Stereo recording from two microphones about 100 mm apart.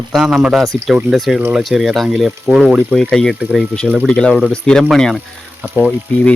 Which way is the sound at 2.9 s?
5° left (ahead or behind).